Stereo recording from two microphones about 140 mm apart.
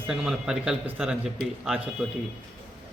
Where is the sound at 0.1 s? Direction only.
5° right (ahead or behind).